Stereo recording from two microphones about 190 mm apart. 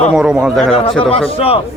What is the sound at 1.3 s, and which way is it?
Speech, 30° left (ahead or behind).